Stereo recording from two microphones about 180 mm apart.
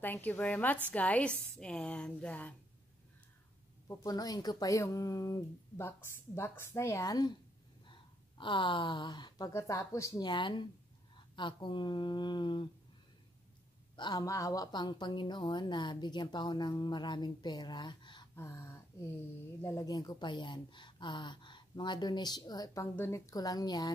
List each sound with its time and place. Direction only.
0.0 s a woman's voice: 10° left (ahead or behind)
3.8 s a woman's voice: 20° left (ahead or behind)
13.9 s a woman's voice: 25° left (ahead or behind)